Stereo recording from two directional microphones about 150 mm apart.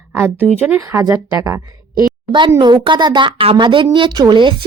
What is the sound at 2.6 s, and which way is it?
A woman's voice, 30° right (ahead or behind).